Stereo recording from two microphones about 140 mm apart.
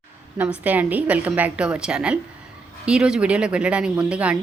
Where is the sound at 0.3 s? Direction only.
10° right (ahead or behind).